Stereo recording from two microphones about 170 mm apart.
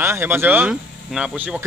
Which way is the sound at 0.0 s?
15° right (ahead or behind).